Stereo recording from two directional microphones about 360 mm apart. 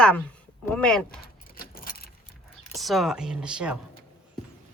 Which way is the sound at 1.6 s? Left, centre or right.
Left.